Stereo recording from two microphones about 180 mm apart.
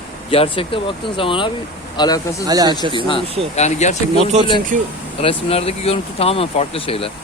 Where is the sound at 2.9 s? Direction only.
30° left (ahead or behind).